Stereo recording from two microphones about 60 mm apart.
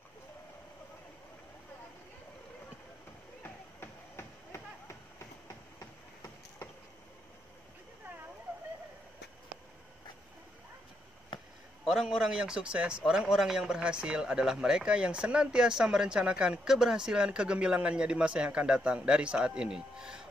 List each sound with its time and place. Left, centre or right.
3.4 s a sound: left
4.5 s train: left
11.9 s a man's voice: centre